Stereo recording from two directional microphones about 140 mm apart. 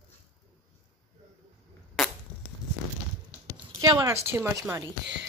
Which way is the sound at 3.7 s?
30° right (ahead or behind).